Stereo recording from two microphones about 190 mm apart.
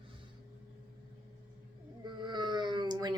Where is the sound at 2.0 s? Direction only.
25° right (ahead or behind).